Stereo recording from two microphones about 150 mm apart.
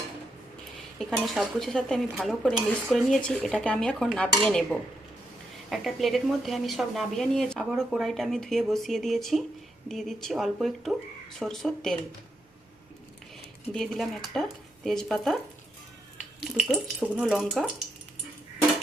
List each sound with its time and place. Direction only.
0.9 s speech: centre (ahead or behind)
13.7 s speech: centre (ahead or behind)